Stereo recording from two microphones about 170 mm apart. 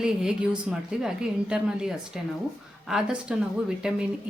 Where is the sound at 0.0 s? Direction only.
5° right (ahead or behind).